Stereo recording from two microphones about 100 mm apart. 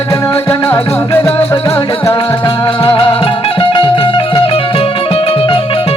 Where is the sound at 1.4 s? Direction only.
25° left (ahead or behind).